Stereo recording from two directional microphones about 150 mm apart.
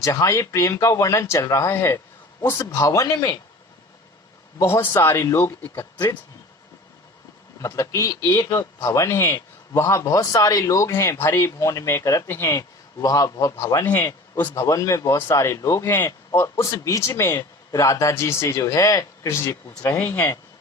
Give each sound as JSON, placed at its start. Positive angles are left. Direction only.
{"t": 0.0, "sound": "speech", "side_deg": 20}
{"t": 4.6, "sound": "speech", "side_deg": 15}
{"t": 7.6, "sound": "speech", "side_deg": 20}
{"t": 13.8, "sound": "speech", "side_deg": 10}